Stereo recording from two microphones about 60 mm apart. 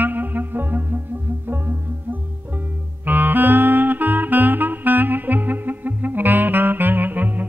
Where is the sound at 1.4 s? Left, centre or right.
Right.